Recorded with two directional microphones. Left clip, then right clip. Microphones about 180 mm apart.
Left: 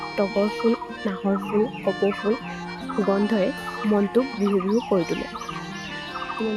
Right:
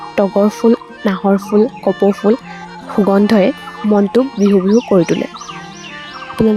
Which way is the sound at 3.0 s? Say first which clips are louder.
Right 11 dB; 50° right (ahead or behind).